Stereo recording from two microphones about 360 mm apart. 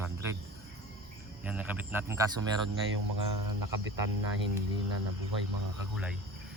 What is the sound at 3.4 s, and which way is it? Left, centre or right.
Speech, right.